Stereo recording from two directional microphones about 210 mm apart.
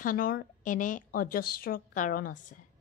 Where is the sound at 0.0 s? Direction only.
40° left (ahead or behind).